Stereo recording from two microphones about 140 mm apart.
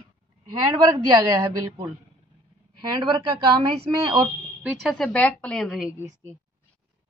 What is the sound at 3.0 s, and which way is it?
A woman's voice, 35° right (ahead or behind).